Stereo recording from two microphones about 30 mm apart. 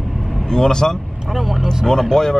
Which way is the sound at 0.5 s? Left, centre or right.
Left.